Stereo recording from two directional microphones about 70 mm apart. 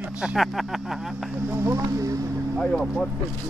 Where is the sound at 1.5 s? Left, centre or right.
Right.